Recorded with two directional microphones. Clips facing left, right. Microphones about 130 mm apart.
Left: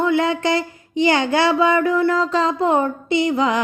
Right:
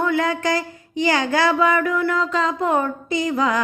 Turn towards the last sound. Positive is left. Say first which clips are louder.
# left 3 dB
turn(degrees=25)  # may be behind; listen again after turning